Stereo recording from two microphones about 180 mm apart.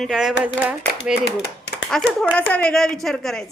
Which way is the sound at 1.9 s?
Centre (ahead or behind).